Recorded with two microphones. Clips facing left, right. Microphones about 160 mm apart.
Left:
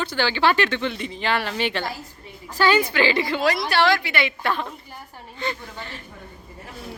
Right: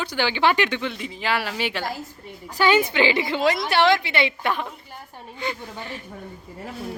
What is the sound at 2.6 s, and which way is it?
A woman's voice, 20° right (ahead or behind).